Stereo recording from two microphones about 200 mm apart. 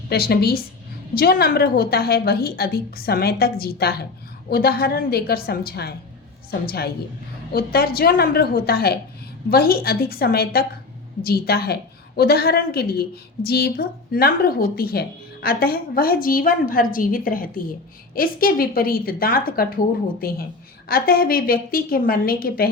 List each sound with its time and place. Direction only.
0.1 s a woman's voice: 50° left (ahead or behind)